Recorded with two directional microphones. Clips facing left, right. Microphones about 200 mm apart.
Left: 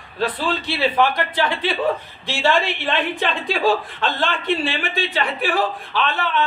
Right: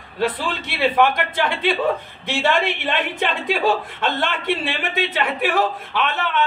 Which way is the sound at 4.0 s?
20° right (ahead or behind).